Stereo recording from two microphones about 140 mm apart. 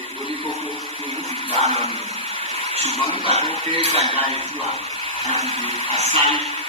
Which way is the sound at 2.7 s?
45° right (ahead or behind).